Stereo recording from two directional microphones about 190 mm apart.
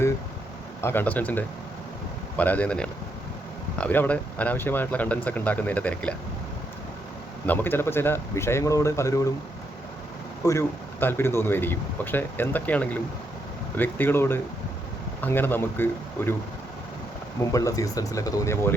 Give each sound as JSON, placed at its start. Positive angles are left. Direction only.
{"t": 0.8, "sound": "a man's voice", "side_deg": 10}
{"t": 7.4, "sound": "a man's voice", "side_deg": 10}
{"t": 10.4, "sound": "a man's voice", "side_deg": 15}
{"t": 17.4, "sound": "a man's voice", "side_deg": 15}